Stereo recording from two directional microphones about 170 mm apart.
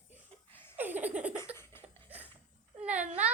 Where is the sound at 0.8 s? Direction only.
10° right (ahead or behind).